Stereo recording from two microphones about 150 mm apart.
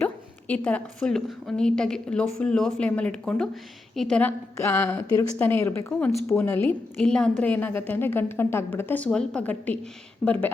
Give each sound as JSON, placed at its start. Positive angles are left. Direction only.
{"t": 0.0, "sound": "a woman's voice", "side_deg": 10}